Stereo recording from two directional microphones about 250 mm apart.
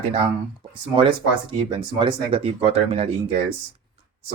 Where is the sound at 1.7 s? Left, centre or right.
Centre.